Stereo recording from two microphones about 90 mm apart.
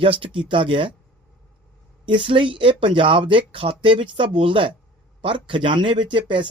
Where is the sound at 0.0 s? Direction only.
75° right (ahead or behind).